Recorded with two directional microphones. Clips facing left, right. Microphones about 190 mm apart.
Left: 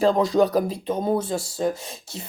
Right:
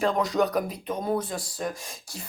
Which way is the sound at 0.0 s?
30° left (ahead or behind).